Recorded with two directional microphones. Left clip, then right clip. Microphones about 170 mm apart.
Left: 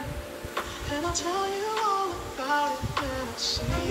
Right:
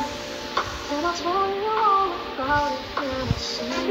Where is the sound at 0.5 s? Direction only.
15° right (ahead or behind).